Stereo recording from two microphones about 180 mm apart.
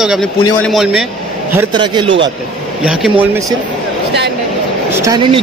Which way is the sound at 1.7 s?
25° right (ahead or behind).